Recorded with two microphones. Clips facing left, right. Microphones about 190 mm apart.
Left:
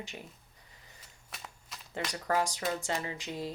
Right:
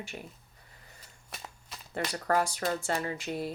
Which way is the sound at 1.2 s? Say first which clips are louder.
Right 2 dB; 30° right (ahead or behind).